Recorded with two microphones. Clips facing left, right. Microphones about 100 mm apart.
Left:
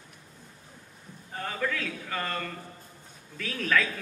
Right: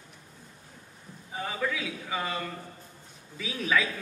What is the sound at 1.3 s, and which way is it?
A man's voice, 5° right (ahead or behind).